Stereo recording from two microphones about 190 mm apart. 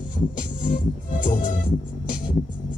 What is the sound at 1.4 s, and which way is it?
Music, 45° left (ahead or behind).